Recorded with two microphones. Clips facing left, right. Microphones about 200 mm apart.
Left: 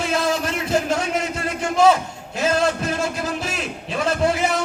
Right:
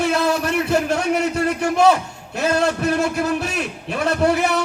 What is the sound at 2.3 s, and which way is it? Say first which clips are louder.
A man's voice: right 1 dB; 60° right (ahead or behind).